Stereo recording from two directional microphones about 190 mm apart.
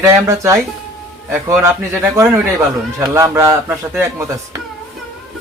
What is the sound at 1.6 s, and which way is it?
A man's voice, 10° right (ahead or behind).